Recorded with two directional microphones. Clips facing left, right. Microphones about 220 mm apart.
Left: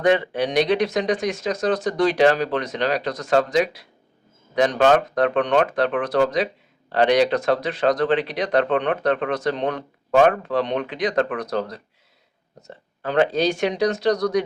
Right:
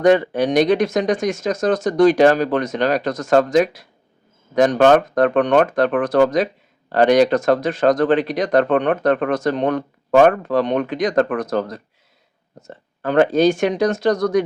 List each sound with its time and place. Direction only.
0.0 s speech: 45° right (ahead or behind)